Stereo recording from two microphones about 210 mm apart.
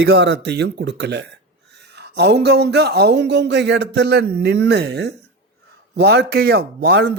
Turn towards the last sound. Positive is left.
turn(degrees=-50)  # may be behind; listen again after turning